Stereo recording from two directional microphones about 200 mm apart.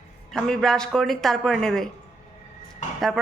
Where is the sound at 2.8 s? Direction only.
35° left (ahead or behind).